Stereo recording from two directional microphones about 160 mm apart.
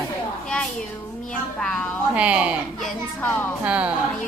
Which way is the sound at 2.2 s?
5° right (ahead or behind).